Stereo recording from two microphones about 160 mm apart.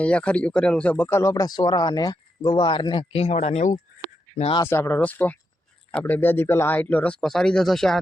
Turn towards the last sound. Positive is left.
turn(degrees=0)  # may be behind; listen again after turning